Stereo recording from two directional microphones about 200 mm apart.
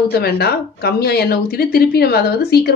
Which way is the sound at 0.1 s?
50° left (ahead or behind).